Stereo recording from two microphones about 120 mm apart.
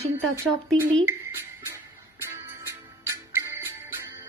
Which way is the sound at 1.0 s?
20° right (ahead or behind).